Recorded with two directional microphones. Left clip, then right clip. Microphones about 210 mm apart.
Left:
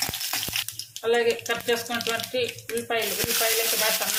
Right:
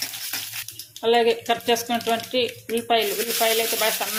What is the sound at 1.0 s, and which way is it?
Speech, 30° right (ahead or behind).